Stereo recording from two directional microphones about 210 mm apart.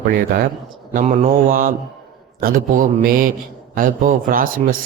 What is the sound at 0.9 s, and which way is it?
A man's voice, 35° right (ahead or behind).